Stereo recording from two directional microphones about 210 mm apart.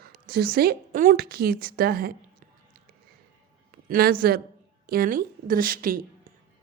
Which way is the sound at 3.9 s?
45° right (ahead or behind).